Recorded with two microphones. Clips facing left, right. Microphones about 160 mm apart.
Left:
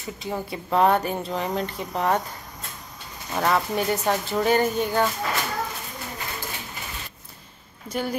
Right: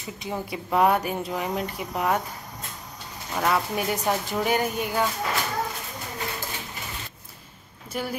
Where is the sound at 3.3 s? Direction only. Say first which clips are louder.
Left 2 dB; 5° right (ahead or behind).